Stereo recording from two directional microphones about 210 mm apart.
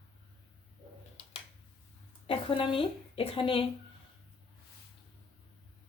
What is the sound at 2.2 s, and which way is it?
A woman's voice, 25° left (ahead or behind).